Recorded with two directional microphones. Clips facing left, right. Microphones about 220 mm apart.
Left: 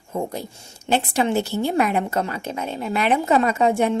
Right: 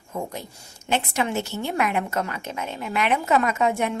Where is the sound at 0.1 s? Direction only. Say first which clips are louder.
Left 5 dB; 30° left (ahead or behind).